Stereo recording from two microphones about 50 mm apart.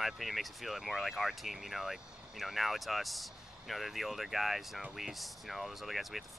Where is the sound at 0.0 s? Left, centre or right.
Centre.